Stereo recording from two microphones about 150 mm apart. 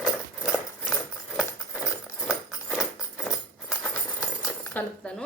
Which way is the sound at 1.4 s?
5° right (ahead or behind).